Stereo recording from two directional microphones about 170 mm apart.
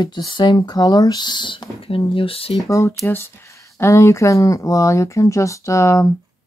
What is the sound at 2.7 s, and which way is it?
Speech, 15° left (ahead or behind).